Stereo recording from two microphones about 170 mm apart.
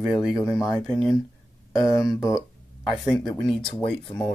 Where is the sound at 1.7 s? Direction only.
20° left (ahead or behind).